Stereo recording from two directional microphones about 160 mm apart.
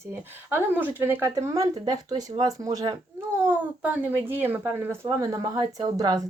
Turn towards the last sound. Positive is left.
turn(degrees=-25)  # may be behind; listen again after turning